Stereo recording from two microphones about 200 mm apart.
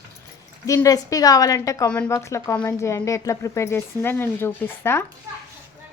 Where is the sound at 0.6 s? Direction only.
15° left (ahead or behind).